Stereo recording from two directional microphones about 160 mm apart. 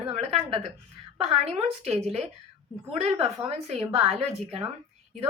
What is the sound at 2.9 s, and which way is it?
A woman's voice, 35° right (ahead or behind).